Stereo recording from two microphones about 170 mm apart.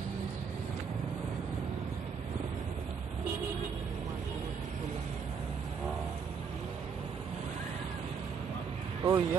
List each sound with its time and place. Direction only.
9.0 s speech: 15° right (ahead or behind)